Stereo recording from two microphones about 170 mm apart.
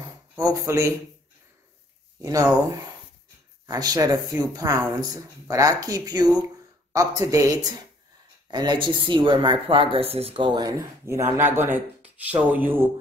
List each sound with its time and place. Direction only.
0.4 s speech: 20° right (ahead or behind)
2.2 s speech: 20° right (ahead or behind)
3.6 s speech: 20° right (ahead or behind)